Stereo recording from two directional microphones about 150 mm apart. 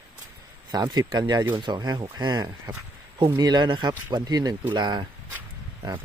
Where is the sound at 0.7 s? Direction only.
25° right (ahead or behind).